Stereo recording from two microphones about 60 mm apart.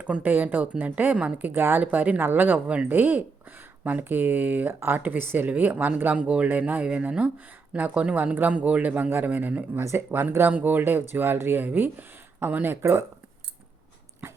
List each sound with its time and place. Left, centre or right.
0.0 s speech: right
1.8 s speech: right
4.7 s speech: right
12.8 s speech: right